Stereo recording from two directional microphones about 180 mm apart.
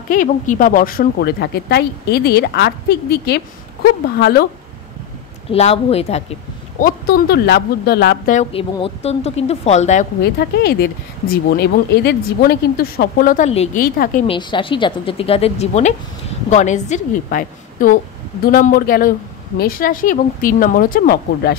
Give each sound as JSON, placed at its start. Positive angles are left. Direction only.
{"t": 0.1, "sound": "a woman's voice", "side_deg": 45}
{"t": 5.5, "sound": "speech", "side_deg": 35}
{"t": 6.8, "sound": "a woman's voice", "side_deg": 60}
{"t": 8.5, "sound": "speech", "side_deg": 35}
{"t": 10.2, "sound": "a woman's voice", "side_deg": 65}
{"t": 14.2, "sound": "speech", "side_deg": 30}